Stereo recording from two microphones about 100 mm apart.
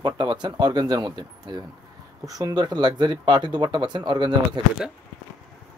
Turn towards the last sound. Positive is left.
turn(degrees=-40)  # may be behind; listen again after turning